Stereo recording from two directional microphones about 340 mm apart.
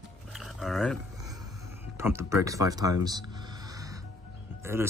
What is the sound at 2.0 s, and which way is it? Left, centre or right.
Speech, centre.